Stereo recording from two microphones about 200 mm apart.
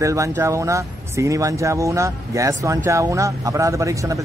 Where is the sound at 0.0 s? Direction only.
15° right (ahead or behind).